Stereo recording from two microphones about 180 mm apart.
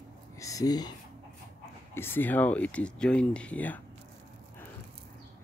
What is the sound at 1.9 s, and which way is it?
Speech, 10° left (ahead or behind).